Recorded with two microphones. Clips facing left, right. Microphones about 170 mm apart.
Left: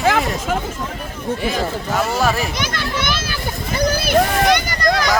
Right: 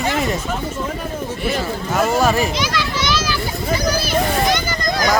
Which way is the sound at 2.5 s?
55° left (ahead or behind).